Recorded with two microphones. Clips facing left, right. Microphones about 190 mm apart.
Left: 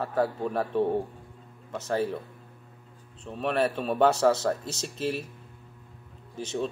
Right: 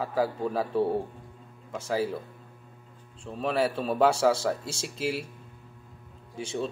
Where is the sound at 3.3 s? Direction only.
Centre (ahead or behind).